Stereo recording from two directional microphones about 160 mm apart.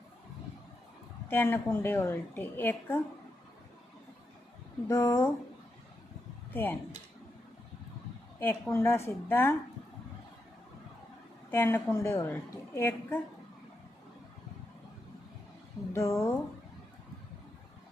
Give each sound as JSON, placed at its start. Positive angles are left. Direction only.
{"t": 1.3, "sound": "a woman's voice", "side_deg": 15}
{"t": 4.9, "sound": "a woman's voice", "side_deg": 15}
{"t": 6.5, "sound": "speech", "side_deg": 10}
{"t": 8.4, "sound": "a woman's voice", "side_deg": 10}
{"t": 11.5, "sound": "a woman's voice", "side_deg": 15}
{"t": 15.9, "sound": "a woman's voice", "side_deg": 15}